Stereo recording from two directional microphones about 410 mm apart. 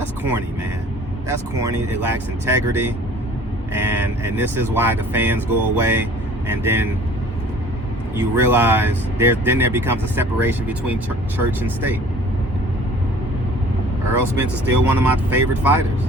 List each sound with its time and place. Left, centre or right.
1.3 s speech: centre
8.4 s speech: centre
14.1 s speech: centre